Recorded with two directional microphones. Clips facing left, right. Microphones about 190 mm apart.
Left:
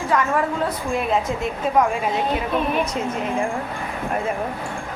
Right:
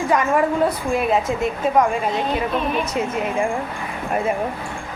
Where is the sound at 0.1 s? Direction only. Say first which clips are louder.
Left 1 dB; 15° right (ahead or behind).